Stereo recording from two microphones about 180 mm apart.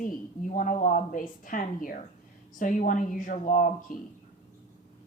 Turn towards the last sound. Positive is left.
turn(degrees=50)  # may be behind; listen again after turning